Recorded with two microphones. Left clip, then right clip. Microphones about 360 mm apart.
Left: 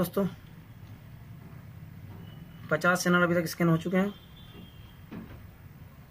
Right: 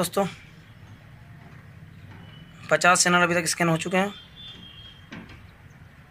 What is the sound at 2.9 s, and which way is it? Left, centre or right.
Speech, centre.